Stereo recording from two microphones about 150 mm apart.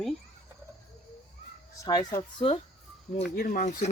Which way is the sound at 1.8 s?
25° left (ahead or behind).